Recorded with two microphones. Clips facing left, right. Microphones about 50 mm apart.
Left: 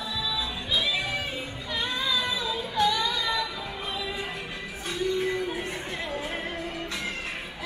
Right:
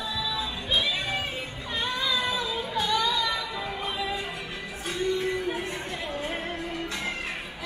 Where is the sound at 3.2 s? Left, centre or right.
Right.